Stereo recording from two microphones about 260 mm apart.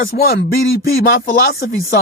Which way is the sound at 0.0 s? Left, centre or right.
Left.